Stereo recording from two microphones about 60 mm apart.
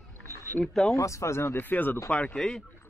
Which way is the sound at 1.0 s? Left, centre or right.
Left.